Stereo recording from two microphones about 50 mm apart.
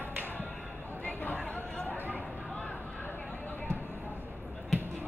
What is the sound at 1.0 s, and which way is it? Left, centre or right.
Chatter, left.